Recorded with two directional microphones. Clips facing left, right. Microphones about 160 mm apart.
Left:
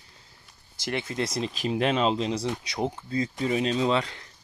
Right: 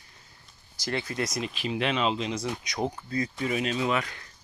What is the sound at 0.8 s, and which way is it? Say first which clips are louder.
Speech: left 1 dB; 20° left (ahead or behind).